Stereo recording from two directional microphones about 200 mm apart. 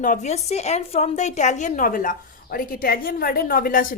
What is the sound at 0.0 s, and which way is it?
Speech, 40° left (ahead or behind).